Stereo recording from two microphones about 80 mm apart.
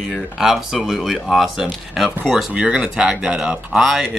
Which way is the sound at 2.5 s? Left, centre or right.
Centre.